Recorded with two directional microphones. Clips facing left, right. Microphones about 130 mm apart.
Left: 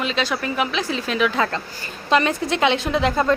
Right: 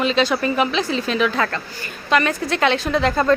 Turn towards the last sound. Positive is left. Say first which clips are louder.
# right 1 dB
turn(degrees=15)  # may be behind; listen again after turning